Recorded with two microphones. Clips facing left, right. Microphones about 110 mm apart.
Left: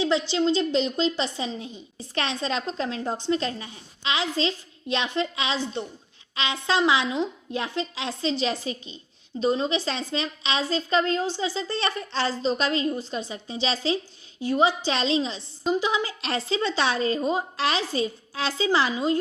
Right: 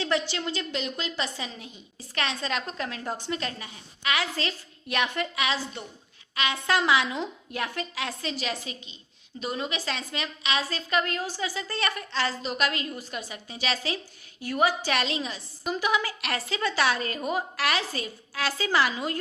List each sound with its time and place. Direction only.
0.0 s a woman's voice: 20° left (ahead or behind)